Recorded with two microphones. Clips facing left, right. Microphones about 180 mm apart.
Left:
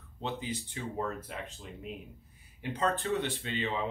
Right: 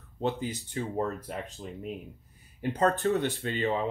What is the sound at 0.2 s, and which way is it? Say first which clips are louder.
Speech: right 6 dB; 45° right (ahead or behind).